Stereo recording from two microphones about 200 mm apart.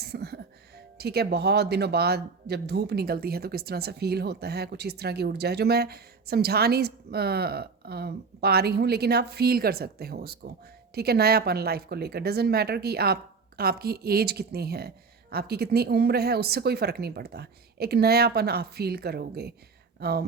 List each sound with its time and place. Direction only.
0.0 s music: 55° right (ahead or behind)
0.9 s speech: 55° right (ahead or behind)